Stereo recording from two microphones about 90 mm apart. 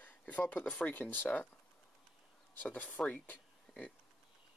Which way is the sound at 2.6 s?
15° left (ahead or behind).